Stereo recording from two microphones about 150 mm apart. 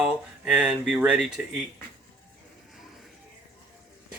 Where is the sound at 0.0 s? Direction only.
5° right (ahead or behind).